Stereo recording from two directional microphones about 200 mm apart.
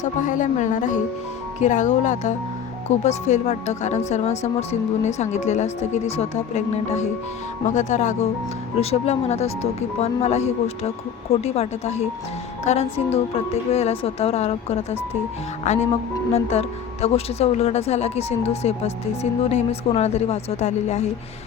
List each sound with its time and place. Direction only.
0.0 s speech: 40° left (ahead or behind)